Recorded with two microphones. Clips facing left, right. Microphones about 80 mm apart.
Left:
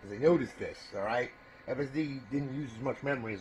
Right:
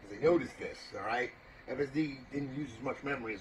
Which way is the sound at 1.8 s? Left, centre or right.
Left.